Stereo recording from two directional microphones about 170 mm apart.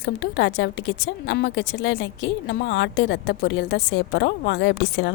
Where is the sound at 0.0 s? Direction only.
90° left.